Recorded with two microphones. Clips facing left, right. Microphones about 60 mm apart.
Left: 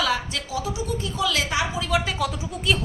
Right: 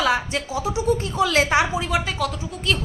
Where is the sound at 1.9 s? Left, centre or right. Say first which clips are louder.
Even; centre.